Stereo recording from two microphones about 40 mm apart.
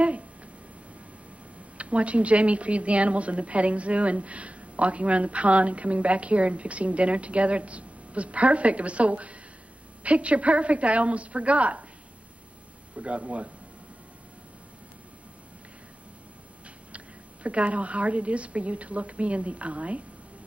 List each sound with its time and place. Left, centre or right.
1.8 s a woman's voice: right
12.9 s a woman's voice: right
16.6 s speech: right